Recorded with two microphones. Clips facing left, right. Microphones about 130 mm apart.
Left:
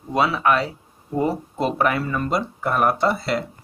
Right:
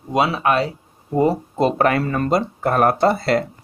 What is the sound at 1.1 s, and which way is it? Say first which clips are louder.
Speech: right 5 dB; 20° right (ahead or behind).